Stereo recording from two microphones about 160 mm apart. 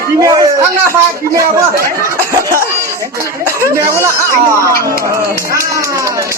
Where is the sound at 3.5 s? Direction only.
20° right (ahead or behind).